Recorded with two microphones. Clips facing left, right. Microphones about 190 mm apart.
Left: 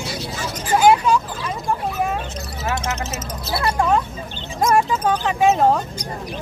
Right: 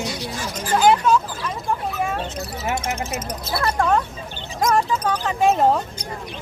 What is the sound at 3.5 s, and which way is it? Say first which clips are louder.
Speech: left 1 dB; 10° left (ahead or behind).